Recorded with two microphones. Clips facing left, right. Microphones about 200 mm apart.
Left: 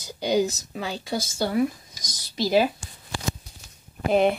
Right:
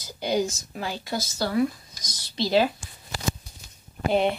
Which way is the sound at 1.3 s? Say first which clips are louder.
Even; 20° left (ahead or behind).